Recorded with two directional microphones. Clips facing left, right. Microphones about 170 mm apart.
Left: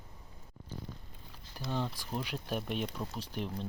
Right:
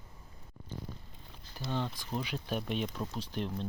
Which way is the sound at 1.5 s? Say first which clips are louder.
Even; 5° left (ahead or behind).